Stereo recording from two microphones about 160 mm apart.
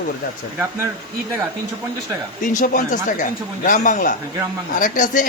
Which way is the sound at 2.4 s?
55° left (ahead or behind).